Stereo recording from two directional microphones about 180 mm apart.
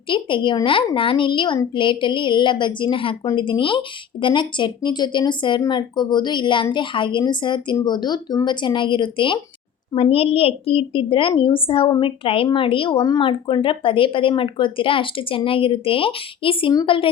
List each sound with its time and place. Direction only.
0.1 s a woman's voice: 25° left (ahead or behind)